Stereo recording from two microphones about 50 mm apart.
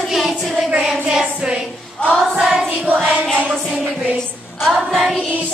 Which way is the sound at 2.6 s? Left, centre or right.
Right.